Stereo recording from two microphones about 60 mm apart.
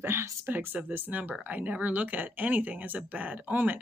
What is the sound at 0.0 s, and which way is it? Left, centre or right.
Speech, right.